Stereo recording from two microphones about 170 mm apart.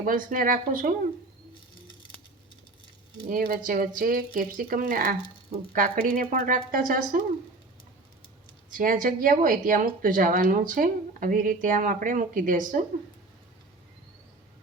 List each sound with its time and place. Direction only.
0.0 s a woman's voice: 55° right (ahead or behind)
3.2 s a woman's voice: 60° right (ahead or behind)
8.7 s a woman's voice: 55° right (ahead or behind)